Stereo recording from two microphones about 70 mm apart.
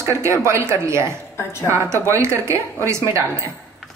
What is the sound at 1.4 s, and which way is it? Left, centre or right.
Speech, left.